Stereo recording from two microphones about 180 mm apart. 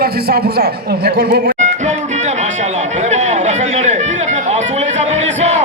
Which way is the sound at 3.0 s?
40° right (ahead or behind).